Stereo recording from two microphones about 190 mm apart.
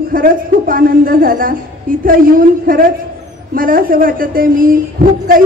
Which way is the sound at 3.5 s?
45° right (ahead or behind).